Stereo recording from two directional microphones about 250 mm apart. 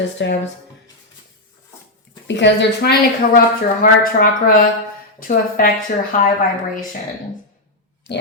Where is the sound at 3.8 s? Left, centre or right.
Left.